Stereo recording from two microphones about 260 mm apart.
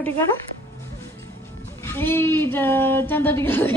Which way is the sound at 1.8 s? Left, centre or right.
Centre.